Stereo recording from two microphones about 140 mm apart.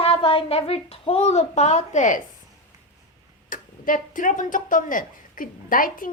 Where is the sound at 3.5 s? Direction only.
75° left (ahead or behind).